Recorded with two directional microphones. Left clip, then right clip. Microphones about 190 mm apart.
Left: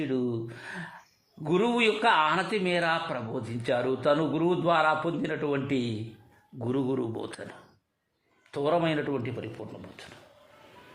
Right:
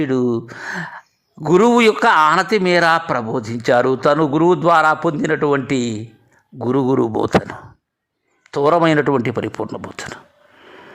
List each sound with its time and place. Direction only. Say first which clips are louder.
0.0 s speech: right 12 dB; 45° right (ahead or behind)